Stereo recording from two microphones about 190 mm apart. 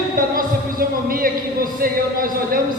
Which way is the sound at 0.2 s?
50° right (ahead or behind).